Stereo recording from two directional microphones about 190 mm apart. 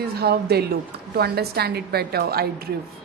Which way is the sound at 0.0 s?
55° right (ahead or behind).